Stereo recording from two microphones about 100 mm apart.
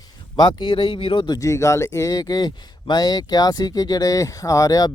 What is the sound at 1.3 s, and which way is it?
Speech, 30° left (ahead or behind).